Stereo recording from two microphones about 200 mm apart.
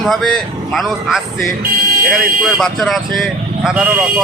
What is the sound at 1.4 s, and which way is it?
Speech, 50° right (ahead or behind).